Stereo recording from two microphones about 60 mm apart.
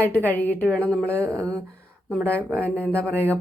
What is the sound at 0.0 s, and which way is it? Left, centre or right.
Speech, left.